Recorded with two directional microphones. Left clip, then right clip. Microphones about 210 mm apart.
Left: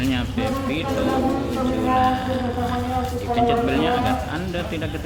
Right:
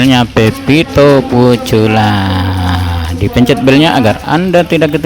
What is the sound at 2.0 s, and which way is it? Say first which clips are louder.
Speech: right 8 dB; 60° right (ahead or behind).